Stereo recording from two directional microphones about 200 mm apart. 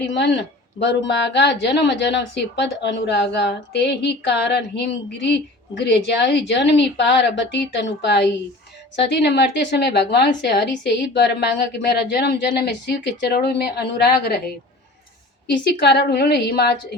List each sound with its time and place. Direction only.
0.0 s speech: 65° left (ahead or behind)
15.8 s speech: 55° left (ahead or behind)